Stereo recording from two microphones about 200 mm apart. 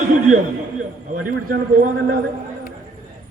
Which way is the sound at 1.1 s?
45° right (ahead or behind).